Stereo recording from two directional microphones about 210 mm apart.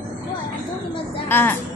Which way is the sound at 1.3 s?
10° left (ahead or behind).